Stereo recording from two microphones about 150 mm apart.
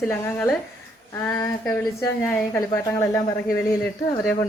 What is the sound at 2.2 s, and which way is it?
A woman's voice, 15° left (ahead or behind).